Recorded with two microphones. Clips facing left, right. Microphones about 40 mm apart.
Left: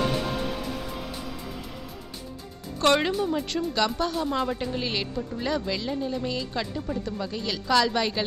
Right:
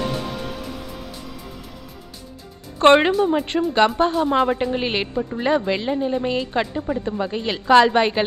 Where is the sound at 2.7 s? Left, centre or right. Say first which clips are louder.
Right 8 dB; right.